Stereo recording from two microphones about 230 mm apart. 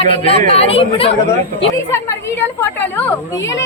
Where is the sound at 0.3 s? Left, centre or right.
Left.